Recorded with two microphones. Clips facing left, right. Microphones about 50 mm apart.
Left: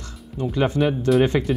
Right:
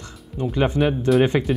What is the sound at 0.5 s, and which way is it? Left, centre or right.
Speech, centre.